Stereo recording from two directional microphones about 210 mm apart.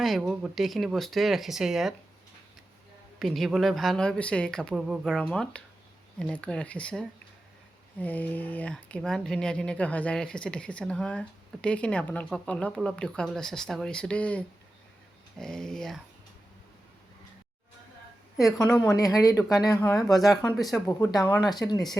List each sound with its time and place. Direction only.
0.0 s speech: centre (ahead or behind)
3.2 s speech: centre (ahead or behind)
18.3 s speech: 15° left (ahead or behind)